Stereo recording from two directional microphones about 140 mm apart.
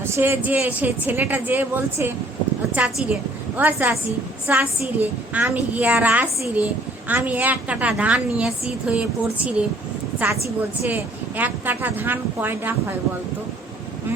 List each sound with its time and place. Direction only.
0.0 s a woman's voice: 15° right (ahead or behind)